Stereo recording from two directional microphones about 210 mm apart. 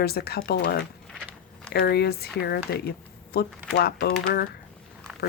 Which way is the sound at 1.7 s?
50° left (ahead or behind).